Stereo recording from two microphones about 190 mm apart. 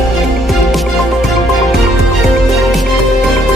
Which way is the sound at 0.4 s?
Centre (ahead or behind).